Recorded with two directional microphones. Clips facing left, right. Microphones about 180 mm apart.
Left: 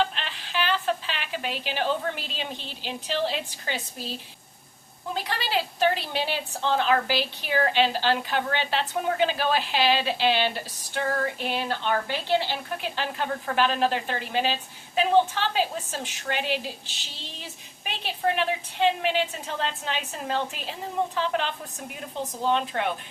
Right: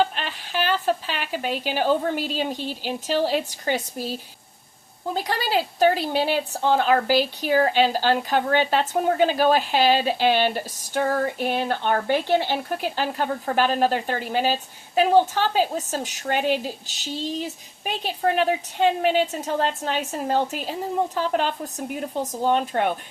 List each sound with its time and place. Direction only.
0.0 s a woman's voice: 45° right (ahead or behind)
5.1 s a woman's voice: 40° right (ahead or behind)